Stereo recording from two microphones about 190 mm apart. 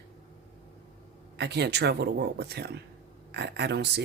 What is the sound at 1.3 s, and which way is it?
Speech, 65° right (ahead or behind).